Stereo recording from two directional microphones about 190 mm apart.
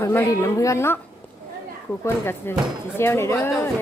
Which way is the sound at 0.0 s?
15° left (ahead or behind).